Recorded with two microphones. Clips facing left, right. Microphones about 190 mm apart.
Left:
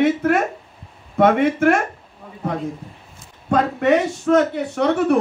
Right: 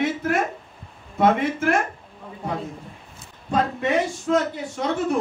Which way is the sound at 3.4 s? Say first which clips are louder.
Left 6 dB; 65° left (ahead or behind).